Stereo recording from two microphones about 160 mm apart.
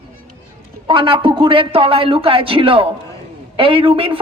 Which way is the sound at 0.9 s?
35° right (ahead or behind).